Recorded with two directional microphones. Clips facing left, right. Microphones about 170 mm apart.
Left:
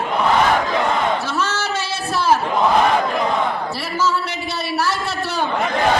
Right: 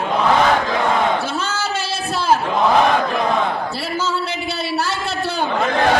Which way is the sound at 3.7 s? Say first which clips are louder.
Left 1 dB; 30° right (ahead or behind).